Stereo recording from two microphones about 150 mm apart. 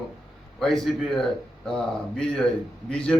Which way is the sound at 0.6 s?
Centre (ahead or behind).